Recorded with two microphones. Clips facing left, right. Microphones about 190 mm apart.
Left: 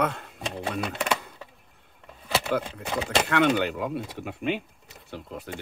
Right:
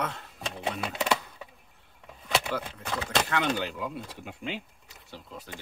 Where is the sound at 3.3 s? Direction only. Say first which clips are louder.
Left 6 dB; 65° left (ahead or behind).